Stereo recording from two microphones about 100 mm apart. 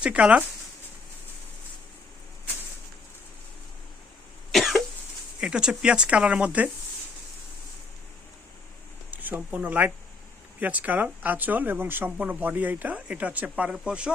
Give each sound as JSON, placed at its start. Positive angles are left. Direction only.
{"t": 0.0, "sound": "speech", "side_deg": -15}
{"t": 4.5, "sound": "cough", "side_deg": 0}
{"t": 5.4, "sound": "speech", "side_deg": -10}
{"t": 9.0, "sound": "speech", "side_deg": -15}